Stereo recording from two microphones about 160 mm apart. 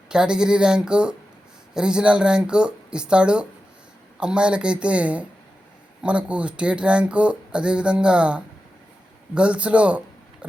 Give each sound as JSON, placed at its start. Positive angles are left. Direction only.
{"t": 0.1, "sound": "speech", "side_deg": -5}